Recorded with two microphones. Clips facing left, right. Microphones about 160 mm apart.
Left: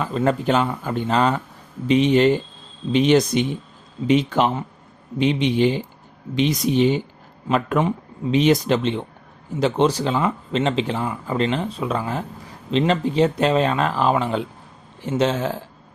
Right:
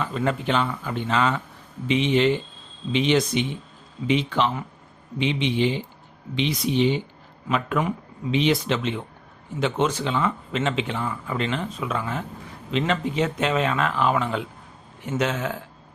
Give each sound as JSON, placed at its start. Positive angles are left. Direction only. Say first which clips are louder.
{"t": 0.0, "sound": "speech", "louder": "left 4 dB", "side_deg": 40}